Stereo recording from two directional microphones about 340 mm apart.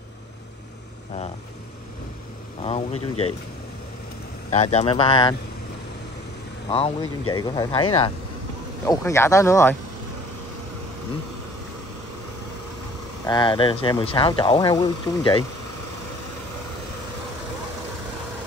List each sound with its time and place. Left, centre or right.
2.6 s speech: centre
4.5 s speech: centre
6.7 s speech: centre
8.8 s speech: centre
13.2 s speech: centre